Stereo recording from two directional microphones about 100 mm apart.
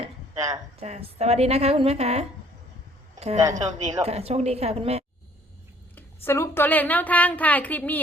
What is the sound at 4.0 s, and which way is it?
A woman's voice, 90° right.